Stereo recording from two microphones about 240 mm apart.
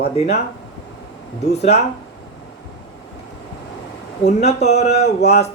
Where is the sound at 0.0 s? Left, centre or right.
Left.